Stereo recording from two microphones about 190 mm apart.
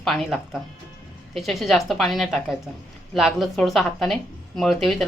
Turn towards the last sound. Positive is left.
turn(degrees=0)  # may be behind; listen again after turning